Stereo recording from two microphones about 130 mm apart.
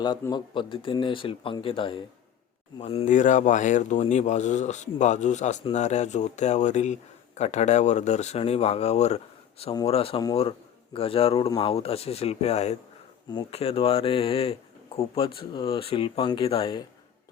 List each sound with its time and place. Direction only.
0.0 s speech: 35° left (ahead or behind)
3.1 s a man's voice: 75° left (ahead or behind); by 16.8 s 40° left (ahead or behind)